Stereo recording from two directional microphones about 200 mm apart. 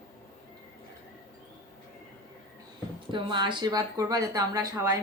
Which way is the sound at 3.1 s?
25° right (ahead or behind).